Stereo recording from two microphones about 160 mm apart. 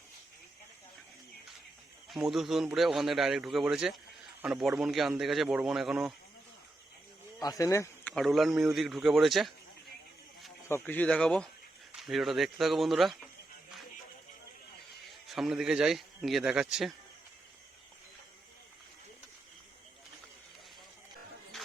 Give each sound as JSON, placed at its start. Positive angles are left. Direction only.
{"t": 2.0, "sound": "a man's voice", "side_deg": 0}
{"t": 7.3, "sound": "speech", "side_deg": 20}
{"t": 8.1, "sound": "a man's voice", "side_deg": 0}
{"t": 10.7, "sound": "a man's voice", "side_deg": 15}
{"t": 15.3, "sound": "a man's voice", "side_deg": -5}
{"t": 21.5, "sound": "vehicle", "side_deg": 0}